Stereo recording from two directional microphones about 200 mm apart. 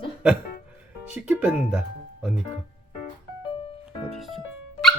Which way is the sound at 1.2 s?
5° right (ahead or behind).